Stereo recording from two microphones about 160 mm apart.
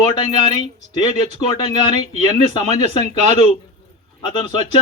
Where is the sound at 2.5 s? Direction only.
30° left (ahead or behind).